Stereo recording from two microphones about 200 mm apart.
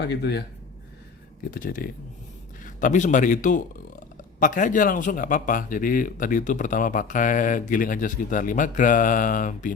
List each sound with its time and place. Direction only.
0.0 s a man's voice: 55° left (ahead or behind)
1.5 s speech: 45° left (ahead or behind)